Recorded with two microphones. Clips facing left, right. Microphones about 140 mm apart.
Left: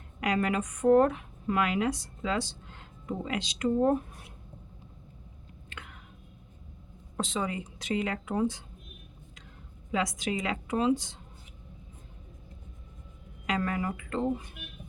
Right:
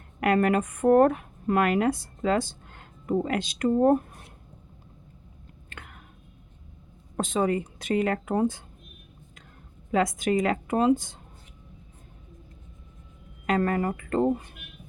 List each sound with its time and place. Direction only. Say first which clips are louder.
0.2 s speech: right 6 dB; 55° right (ahead or behind)
5.7 s a sound: right 1 dB; 45° right (ahead or behind)
7.2 s speech: right 7 dB; 50° right (ahead or behind)
9.9 s speech: right 7 dB; 50° right (ahead or behind)
13.5 s speech: right 6 dB; 50° right (ahead or behind)